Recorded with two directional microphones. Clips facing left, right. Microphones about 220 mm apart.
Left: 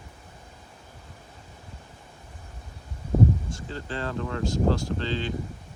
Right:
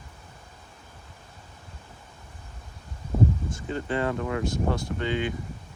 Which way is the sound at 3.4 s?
20° right (ahead or behind).